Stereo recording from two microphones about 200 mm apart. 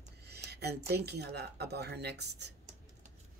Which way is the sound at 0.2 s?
55° right (ahead or behind).